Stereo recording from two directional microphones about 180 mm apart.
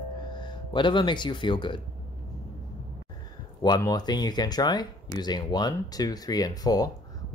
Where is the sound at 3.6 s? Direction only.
20° left (ahead or behind).